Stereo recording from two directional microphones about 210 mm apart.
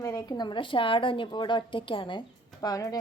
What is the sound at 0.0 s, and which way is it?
A woman's voice, 15° left (ahead or behind).